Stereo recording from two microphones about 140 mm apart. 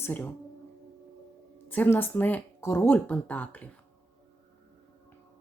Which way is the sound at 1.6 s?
15° left (ahead or behind).